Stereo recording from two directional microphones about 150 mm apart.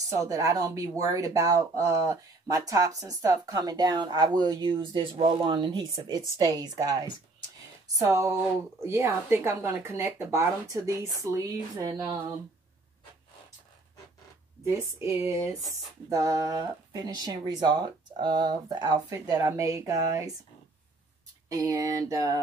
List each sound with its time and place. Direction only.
0.1 s speech: 20° right (ahead or behind)
14.6 s speech: 20° right (ahead or behind)
21.5 s speech: 25° right (ahead or behind)